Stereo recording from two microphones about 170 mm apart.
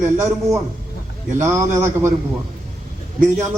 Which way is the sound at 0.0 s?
15° right (ahead or behind).